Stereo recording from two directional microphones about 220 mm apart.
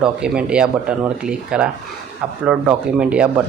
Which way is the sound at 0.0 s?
5° right (ahead or behind).